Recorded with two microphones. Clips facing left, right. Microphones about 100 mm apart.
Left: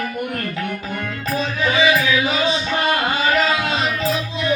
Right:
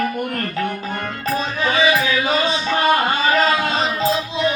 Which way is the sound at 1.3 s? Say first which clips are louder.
Left 1 dB; 45° right (ahead or behind).